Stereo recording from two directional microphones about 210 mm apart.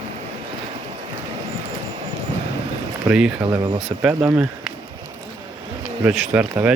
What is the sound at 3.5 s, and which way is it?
Speech, 20° right (ahead or behind).